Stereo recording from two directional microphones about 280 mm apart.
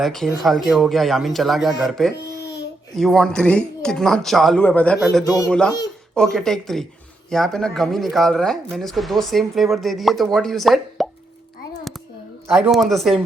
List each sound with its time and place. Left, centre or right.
0.0 s speech: centre
2.4 s babbling: left
2.9 s speech: centre
12.5 s speech: centre